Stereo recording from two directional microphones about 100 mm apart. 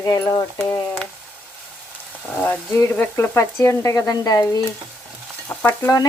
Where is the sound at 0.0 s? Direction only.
40° left (ahead or behind).